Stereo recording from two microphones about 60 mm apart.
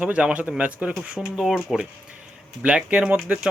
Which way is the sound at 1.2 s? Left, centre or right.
Centre.